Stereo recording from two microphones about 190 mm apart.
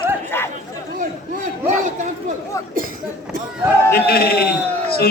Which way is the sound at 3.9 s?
55° left (ahead or behind).